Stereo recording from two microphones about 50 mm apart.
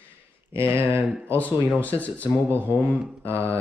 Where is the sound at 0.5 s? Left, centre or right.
Right.